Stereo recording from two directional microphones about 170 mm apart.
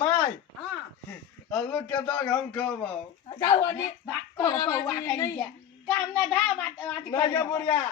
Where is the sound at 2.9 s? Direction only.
25° left (ahead or behind).